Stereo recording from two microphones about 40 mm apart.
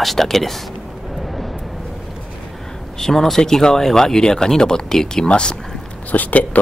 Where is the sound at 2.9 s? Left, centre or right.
Centre.